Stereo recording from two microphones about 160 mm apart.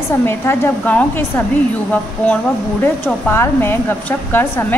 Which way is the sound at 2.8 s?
10° left (ahead or behind).